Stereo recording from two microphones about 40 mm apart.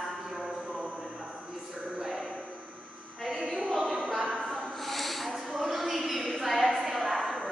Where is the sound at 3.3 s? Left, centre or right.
Centre.